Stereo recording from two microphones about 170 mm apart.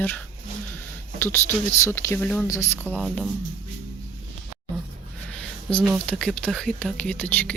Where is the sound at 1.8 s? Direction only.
15° left (ahead or behind).